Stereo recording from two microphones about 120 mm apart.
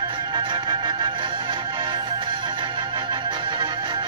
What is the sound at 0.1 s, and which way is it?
Music, 45° right (ahead or behind).